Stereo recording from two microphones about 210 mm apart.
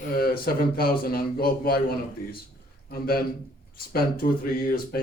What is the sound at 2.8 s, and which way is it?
Speech, 45° left (ahead or behind).